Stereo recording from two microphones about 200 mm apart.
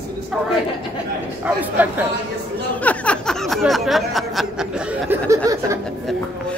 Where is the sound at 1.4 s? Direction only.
10° right (ahead or behind).